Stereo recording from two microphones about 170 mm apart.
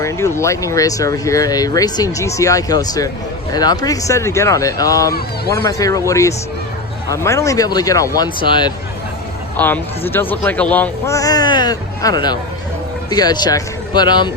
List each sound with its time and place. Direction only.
0.0 s speech: 15° left (ahead or behind)
9.6 s speech: 10° left (ahead or behind); by 14.3 s 25° left (ahead or behind)